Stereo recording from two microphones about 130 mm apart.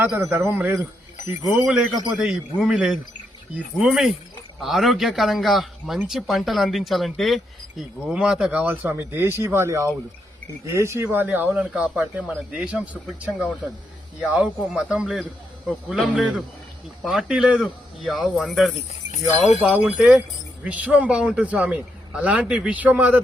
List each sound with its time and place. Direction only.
0.3 s a man's voice: 15° right (ahead or behind)
1.9 s speech: 30° right (ahead or behind)
2.1 s a man's voice: 5° right (ahead or behind)
13.1 s speech: 10° left (ahead or behind)
14.2 s a man's voice: 5° right (ahead or behind)